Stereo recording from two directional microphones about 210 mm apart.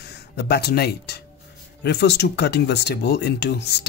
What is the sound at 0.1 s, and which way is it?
Speech, 50° left (ahead or behind).